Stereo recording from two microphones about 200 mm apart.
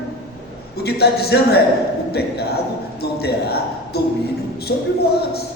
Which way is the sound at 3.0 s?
55° left (ahead or behind).